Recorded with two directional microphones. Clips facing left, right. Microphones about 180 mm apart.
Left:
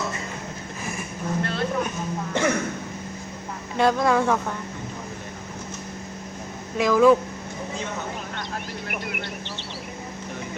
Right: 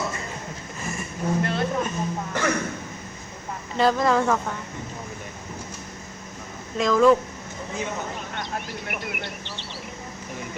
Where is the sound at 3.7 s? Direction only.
Centre (ahead or behind).